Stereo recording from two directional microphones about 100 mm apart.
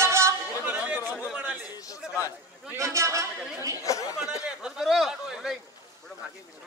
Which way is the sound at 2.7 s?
30° right (ahead or behind).